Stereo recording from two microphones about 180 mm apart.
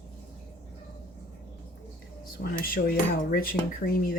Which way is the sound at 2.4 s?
60° left (ahead or behind).